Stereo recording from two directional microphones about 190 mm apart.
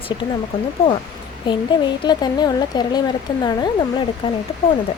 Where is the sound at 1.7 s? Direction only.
25° left (ahead or behind).